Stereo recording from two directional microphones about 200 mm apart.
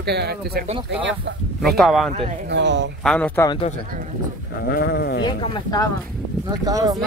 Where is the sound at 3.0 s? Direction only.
5° left (ahead or behind).